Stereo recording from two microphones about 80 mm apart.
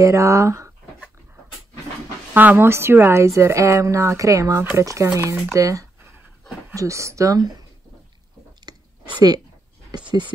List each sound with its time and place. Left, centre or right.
0.0 s speech: right
2.3 s speech: right
8.7 s a sound: right
10.1 s speech: right